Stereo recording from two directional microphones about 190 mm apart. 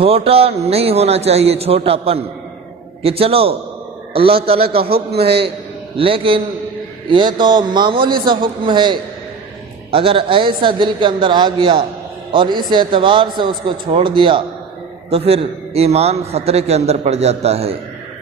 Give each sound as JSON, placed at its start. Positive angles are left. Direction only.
{"t": 0.0, "sound": "a man's voice", "side_deg": -30}